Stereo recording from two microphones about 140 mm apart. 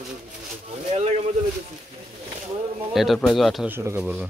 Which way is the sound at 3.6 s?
15° right (ahead or behind).